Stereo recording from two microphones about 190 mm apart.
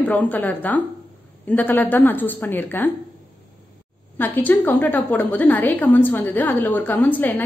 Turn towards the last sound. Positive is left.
turn(degrees=10)  # may be behind; listen again after turning